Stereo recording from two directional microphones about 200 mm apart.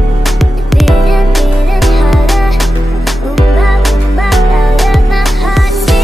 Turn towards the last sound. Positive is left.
turn(degrees=0)  # may be behind; listen again after turning